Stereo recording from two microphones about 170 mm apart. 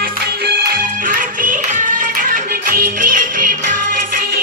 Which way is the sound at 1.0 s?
50° right (ahead or behind).